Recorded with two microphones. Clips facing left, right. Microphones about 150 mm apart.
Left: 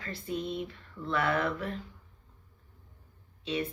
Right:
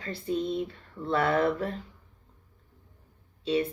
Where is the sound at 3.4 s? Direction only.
35° right (ahead or behind).